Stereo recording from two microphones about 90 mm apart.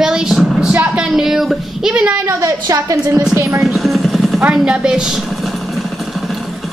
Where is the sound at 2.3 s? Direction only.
40° right (ahead or behind).